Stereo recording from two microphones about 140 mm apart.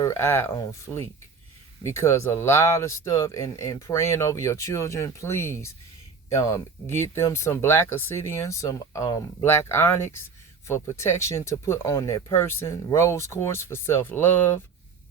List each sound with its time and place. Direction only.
0.0 s speech: 20° left (ahead or behind)